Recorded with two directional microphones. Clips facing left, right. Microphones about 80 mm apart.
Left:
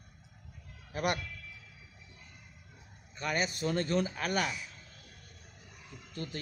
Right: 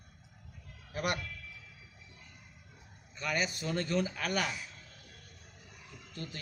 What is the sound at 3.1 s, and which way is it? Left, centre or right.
Speech, left.